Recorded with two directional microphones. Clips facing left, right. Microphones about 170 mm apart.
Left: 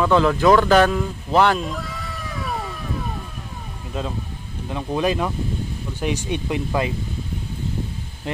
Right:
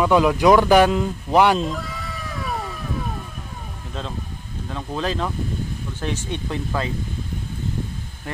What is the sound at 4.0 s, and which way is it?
Speech, 10° left (ahead or behind).